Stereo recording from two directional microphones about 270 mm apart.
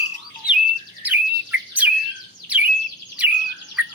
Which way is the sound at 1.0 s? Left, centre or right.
Centre.